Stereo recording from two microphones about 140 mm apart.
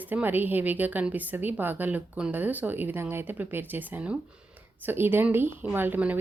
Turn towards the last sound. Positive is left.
turn(degrees=-10)  # may be behind; listen again after turning